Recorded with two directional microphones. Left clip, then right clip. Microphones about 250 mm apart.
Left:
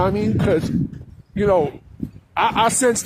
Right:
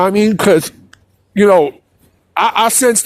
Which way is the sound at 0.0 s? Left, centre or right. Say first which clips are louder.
Right 8 dB; right.